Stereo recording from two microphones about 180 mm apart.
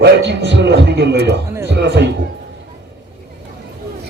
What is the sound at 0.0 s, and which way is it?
A man's voice, 75° right (ahead or behind).